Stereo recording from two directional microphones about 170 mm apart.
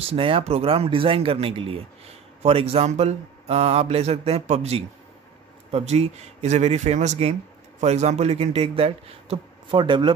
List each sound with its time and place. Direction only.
0.0 s speech: 35° right (ahead or behind)